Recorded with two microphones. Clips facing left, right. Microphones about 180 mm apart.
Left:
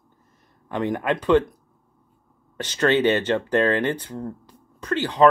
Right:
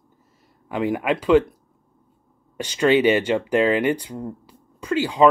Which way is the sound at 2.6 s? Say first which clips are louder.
Right 2 dB; 10° right (ahead or behind).